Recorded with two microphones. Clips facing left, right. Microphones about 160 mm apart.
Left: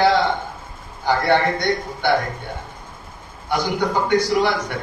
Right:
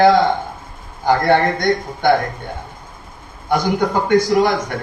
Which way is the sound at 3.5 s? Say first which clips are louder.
Right 4 dB; 45° right (ahead or behind).